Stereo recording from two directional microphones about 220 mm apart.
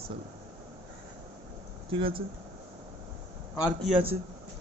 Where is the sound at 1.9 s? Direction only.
25° right (ahead or behind).